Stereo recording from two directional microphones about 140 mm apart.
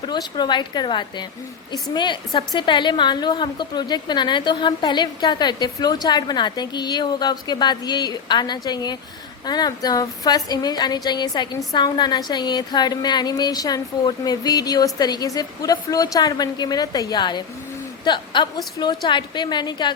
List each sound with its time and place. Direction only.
0.0 s a woman's voice: 30° left (ahead or behind)